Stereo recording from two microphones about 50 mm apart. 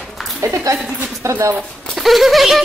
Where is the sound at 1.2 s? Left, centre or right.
Right.